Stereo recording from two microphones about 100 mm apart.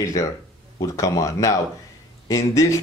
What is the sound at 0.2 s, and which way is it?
Speech, 30° left (ahead or behind).